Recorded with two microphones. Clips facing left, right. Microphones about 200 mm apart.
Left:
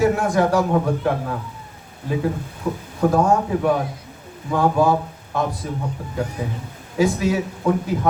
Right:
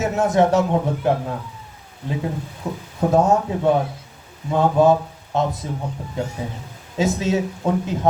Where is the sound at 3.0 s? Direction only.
20° right (ahead or behind).